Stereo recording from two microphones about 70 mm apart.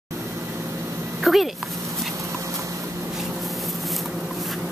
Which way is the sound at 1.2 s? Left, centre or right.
Centre.